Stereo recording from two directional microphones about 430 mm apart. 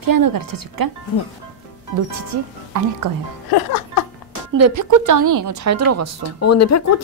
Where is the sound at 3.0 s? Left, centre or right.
Right.